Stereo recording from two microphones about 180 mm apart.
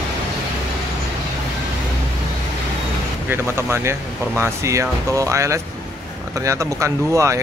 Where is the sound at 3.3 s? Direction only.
15° right (ahead or behind).